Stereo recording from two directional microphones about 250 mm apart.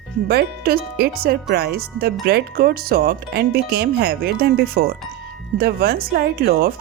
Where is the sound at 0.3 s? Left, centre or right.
Right.